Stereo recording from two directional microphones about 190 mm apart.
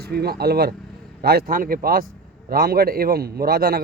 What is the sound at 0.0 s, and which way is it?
Speech, 55° right (ahead or behind).